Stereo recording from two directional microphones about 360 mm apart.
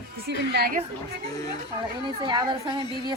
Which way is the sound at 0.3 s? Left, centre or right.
Right.